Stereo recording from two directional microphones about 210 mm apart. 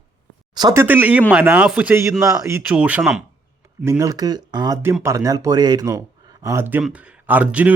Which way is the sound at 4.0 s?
15° right (ahead or behind).